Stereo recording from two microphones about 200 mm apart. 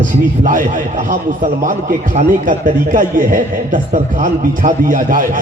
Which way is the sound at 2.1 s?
40° right (ahead or behind).